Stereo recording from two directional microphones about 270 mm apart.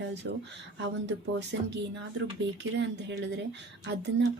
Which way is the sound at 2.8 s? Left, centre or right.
Right.